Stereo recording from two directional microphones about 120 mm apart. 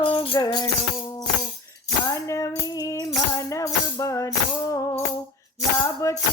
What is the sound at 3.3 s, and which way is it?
Music, 25° left (ahead or behind).